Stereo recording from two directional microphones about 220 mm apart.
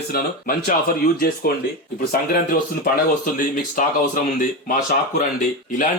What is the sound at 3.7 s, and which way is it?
Speech, 35° left (ahead or behind).